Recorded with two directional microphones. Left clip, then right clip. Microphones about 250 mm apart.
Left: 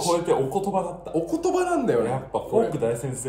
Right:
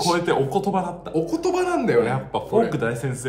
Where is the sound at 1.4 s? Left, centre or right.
Centre.